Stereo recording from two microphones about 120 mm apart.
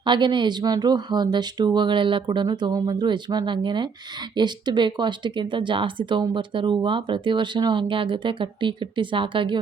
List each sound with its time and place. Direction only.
0.0 s a woman's voice: 40° right (ahead or behind)